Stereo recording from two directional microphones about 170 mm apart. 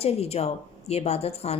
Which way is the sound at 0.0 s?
35° left (ahead or behind).